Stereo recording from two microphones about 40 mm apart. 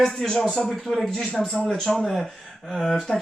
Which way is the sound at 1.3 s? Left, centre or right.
Centre.